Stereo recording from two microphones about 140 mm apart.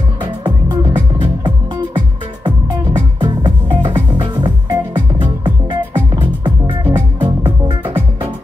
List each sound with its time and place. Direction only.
0.2 s music: 35° right (ahead or behind)